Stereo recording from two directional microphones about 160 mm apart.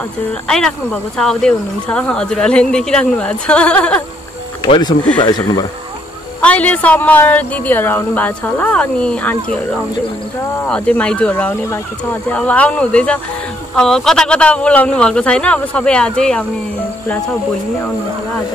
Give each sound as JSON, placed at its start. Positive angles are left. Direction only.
{"t": 0.3, "sound": "speech", "side_deg": 5}
{"t": 4.6, "sound": "speech", "side_deg": 30}
{"t": 6.4, "sound": "a woman's voice", "side_deg": 10}
{"t": 10.6, "sound": "a woman's voice", "side_deg": 5}